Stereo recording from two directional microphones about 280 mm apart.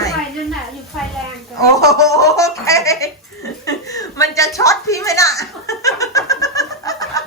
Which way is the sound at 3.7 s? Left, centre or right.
Centre.